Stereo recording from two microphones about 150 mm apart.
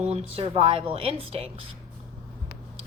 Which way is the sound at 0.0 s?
45° right (ahead or behind).